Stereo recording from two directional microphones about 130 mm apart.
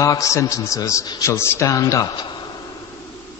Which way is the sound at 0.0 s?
25° left (ahead or behind).